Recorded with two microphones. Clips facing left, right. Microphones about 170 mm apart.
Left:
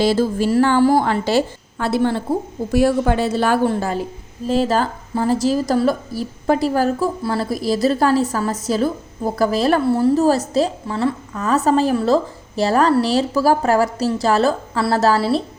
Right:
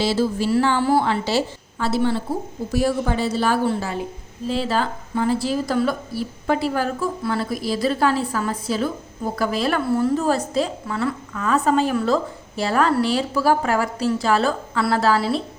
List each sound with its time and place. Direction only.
0.0 s a woman's voice: 50° left (ahead or behind)